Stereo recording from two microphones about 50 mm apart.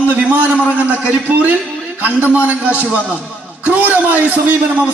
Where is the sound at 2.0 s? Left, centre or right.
Right.